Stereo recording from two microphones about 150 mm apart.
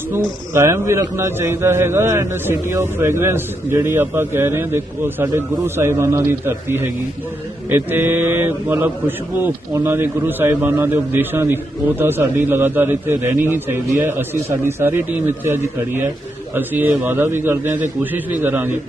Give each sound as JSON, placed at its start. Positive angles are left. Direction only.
{"t": 0.1, "sound": "a man's voice", "side_deg": -15}